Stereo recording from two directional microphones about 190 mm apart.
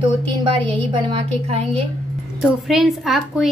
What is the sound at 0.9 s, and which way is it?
Speech, 25° right (ahead or behind).